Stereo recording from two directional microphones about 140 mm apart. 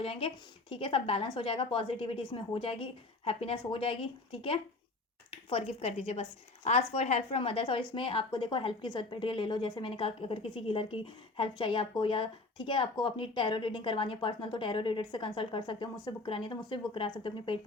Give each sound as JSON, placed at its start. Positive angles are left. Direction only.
{"t": 0.0, "sound": "a woman's voice", "side_deg": 40}